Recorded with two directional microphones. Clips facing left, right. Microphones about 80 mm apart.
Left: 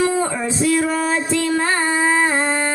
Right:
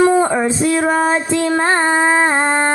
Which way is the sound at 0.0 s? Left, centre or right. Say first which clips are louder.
Right 6 dB; right.